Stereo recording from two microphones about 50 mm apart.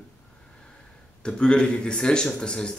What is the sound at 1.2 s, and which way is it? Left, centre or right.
Speech, centre.